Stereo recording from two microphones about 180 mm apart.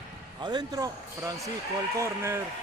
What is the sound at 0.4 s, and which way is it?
A man's voice, 25° right (ahead or behind).